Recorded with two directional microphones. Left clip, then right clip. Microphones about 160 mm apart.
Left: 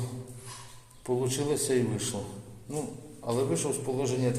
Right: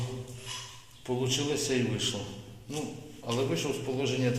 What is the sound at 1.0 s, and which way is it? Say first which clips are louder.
Speech: left 1 dB; 30° left (ahead or behind).